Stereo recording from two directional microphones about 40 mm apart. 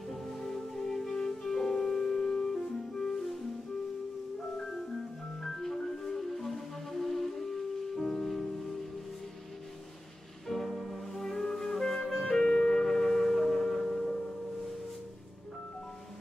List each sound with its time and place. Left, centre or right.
0.1 s music: centre
4.6 s music: centre
10.5 s music: centre
12.3 s music: centre